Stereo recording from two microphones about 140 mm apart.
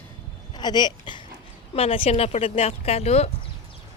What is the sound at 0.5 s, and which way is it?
Speech, 30° left (ahead or behind).